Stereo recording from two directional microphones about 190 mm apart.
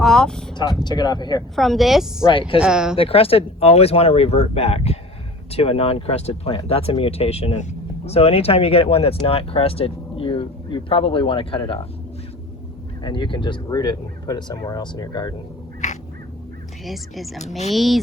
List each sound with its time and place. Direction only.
0.0 s vehicle: 5° left (ahead or behind)
0.5 s speech: 20° left (ahead or behind)
1.5 s speech: centre (ahead or behind)
3.0 s speech: 30° left (ahead or behind)
13.0 s speech: 25° left (ahead or behind)
15.8 s crow: 40° left (ahead or behind)
16.8 s speech: centre (ahead or behind)